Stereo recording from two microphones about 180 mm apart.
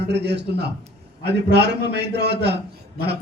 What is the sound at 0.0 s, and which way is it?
A man's voice, 70° right (ahead or behind).